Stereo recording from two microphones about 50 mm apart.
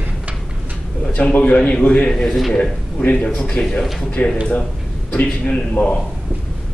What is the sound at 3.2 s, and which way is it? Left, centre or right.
A man's voice, left.